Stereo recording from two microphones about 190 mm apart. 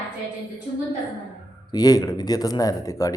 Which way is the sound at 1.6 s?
20° left (ahead or behind).